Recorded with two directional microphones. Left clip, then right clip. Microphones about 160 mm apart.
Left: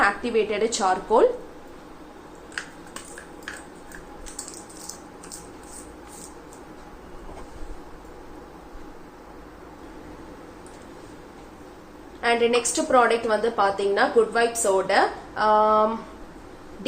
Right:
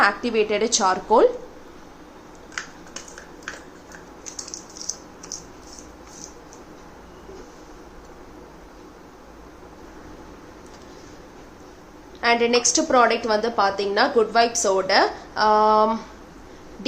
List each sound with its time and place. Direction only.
0.0 s a woman's voice: 30° right (ahead or behind)
4.9 s a sound: 20° left (ahead or behind)
12.2 s a woman's voice: 30° right (ahead or behind)